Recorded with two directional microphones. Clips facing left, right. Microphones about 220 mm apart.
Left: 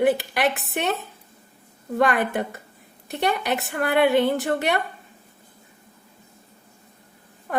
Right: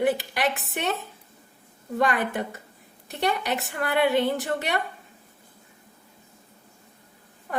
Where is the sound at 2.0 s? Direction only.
60° left (ahead or behind).